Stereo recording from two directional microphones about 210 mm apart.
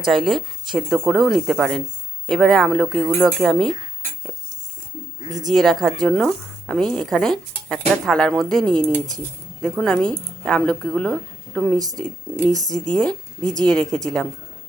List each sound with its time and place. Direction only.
0.0 s a woman's voice: centre (ahead or behind)
5.5 s a woman's voice: centre (ahead or behind)